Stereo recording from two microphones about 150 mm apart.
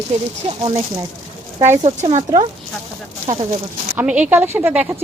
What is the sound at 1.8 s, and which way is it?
Speech, 45° right (ahead or behind).